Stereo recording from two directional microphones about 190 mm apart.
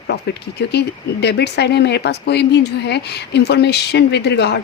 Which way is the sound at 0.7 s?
60° left (ahead or behind).